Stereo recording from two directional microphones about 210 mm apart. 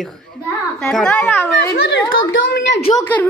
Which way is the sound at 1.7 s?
50° left (ahead or behind).